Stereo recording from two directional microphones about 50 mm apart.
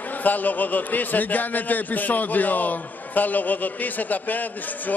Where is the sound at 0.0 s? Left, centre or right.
Left.